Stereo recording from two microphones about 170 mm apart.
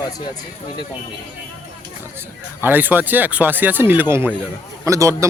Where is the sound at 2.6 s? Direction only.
10° right (ahead or behind).